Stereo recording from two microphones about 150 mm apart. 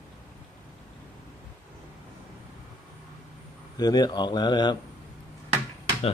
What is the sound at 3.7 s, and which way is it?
Speech, 25° left (ahead or behind).